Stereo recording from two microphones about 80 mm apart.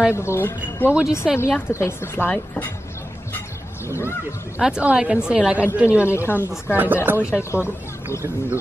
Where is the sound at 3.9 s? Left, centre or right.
Left.